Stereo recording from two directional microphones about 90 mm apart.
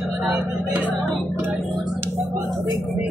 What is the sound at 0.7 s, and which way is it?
Music, 20° right (ahead or behind).